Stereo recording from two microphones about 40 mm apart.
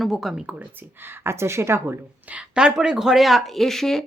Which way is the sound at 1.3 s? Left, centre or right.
Right.